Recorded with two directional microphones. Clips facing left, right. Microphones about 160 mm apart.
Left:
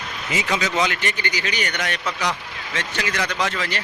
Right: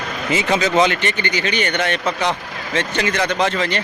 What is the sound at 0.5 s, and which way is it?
Speech, 45° right (ahead or behind).